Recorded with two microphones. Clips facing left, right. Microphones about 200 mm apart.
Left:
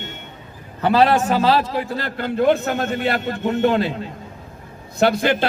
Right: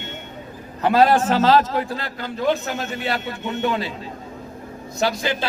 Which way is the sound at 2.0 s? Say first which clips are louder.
Left 9 dB; 55° left (ahead or behind).